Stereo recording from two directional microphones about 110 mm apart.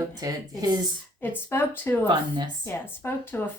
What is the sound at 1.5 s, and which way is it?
Speech, 20° left (ahead or behind).